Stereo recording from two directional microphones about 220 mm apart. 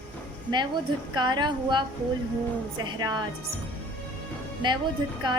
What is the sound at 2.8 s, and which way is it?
Speech, 20° right (ahead or behind).